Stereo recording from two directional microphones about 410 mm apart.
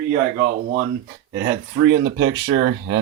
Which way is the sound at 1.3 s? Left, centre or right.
Right.